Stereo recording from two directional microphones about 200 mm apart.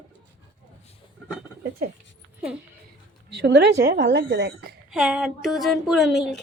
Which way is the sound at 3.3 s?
55° right (ahead or behind).